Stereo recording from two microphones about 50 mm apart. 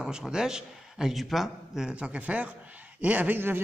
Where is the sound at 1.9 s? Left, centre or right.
Right.